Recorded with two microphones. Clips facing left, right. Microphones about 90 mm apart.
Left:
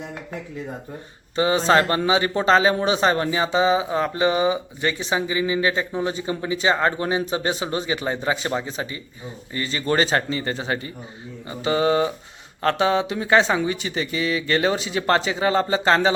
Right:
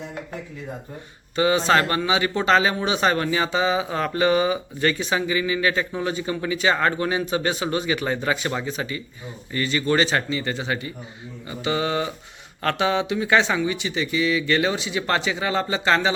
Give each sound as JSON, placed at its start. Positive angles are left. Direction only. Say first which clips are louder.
{"t": 1.4, "sound": "speech", "louder": "left 1 dB", "side_deg": 30}